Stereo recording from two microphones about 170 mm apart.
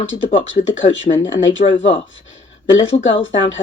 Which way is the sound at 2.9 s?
30° left (ahead or behind).